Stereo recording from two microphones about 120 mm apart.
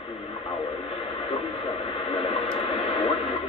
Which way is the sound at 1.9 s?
50° left (ahead or behind).